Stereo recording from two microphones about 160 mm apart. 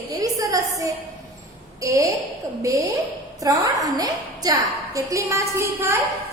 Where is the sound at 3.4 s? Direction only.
20° right (ahead or behind).